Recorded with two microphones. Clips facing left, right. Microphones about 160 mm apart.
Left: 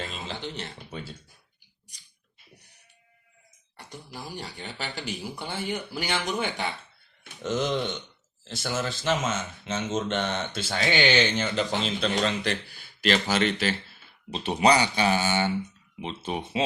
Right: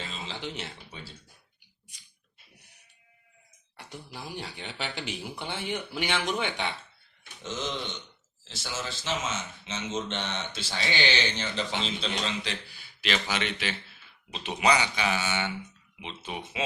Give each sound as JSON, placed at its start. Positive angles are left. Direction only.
{"t": 0.3, "sound": "speech", "side_deg": -5}
{"t": 0.9, "sound": "a sound", "side_deg": 50}
{"t": 3.8, "sound": "speech", "side_deg": 0}
{"t": 7.4, "sound": "speech", "side_deg": 55}